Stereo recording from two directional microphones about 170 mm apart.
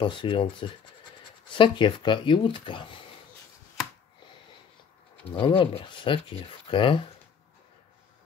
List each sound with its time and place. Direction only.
0.0 s speech: 30° left (ahead or behind)
5.2 s speech: 30° left (ahead or behind)